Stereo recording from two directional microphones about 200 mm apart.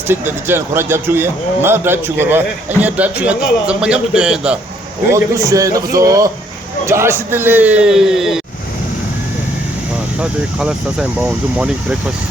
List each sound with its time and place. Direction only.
0.1 s a man's voice: 10° right (ahead or behind)
5.1 s a man's voice: 15° right (ahead or behind)
10.2 s a man's voice: 5° right (ahead or behind)